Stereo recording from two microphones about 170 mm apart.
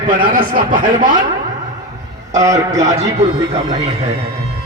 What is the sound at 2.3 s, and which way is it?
Speech, 20° right (ahead or behind).